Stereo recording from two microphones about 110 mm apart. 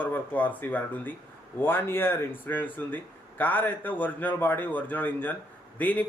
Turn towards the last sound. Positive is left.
turn(degrees=15)  # may be behind; listen again after turning